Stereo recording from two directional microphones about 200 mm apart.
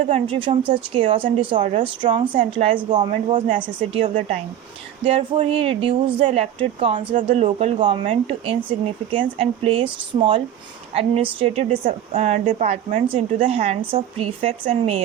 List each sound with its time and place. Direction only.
0.1 s speech: 25° right (ahead or behind)
3.9 s a woman's voice: 35° right (ahead or behind)